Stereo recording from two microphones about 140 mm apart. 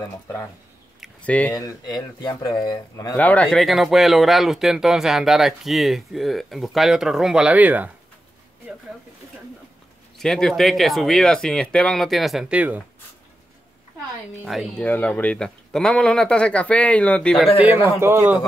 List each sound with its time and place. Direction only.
1.2 s speech: 10° left (ahead or behind)
1.5 s speech: 25° left (ahead or behind)
3.2 s speech: 10° left (ahead or behind)
3.5 s speech: centre (ahead or behind)
10.1 s speech: centre (ahead or behind)
14.4 s speech: centre (ahead or behind)
17.6 s a man's voice: 15° right (ahead or behind)